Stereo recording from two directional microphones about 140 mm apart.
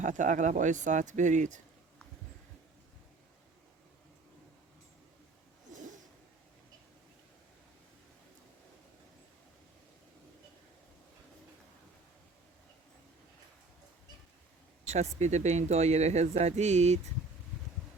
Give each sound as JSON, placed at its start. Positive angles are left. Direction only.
{"t": 0.0, "sound": "speech", "side_deg": -65}
{"t": 15.2, "sound": "speech", "side_deg": -55}